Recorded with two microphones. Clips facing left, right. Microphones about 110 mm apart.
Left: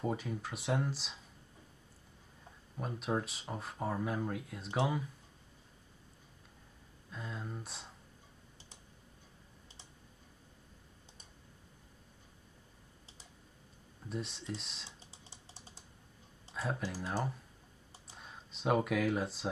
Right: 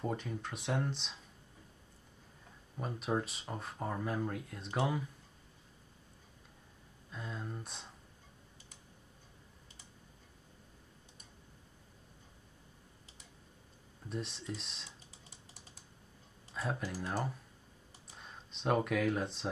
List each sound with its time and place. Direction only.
0.0 s speech: 5° left (ahead or behind)
2.8 s speech: centre (ahead or behind)
7.1 s speech: centre (ahead or behind)
14.0 s speech: centre (ahead or behind)
14.9 s a sound: 30° left (ahead or behind)
16.5 s speech: centre (ahead or behind)